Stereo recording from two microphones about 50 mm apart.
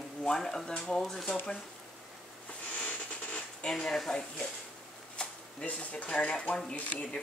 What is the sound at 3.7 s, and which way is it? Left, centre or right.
Speech, centre.